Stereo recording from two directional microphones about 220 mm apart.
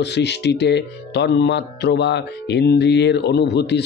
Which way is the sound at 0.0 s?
50° left (ahead or behind).